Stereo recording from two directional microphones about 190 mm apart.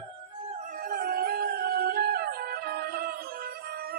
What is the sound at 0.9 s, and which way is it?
Music, 50° right (ahead or behind).